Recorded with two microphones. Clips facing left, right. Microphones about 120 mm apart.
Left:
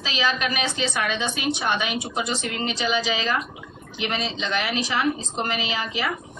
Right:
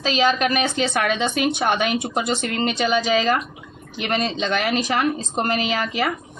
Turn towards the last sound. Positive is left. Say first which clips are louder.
# right 5 dB
turn(degrees=-50)  # may be behind; listen again after turning